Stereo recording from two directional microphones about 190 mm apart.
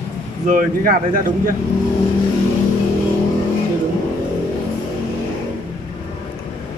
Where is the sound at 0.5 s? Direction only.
50° right (ahead or behind).